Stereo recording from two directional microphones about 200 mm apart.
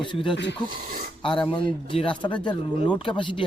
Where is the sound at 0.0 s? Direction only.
25° left (ahead or behind).